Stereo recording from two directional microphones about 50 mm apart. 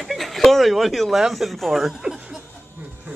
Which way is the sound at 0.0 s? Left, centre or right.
Centre.